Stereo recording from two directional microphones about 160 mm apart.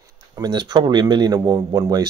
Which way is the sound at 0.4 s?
25° right (ahead or behind).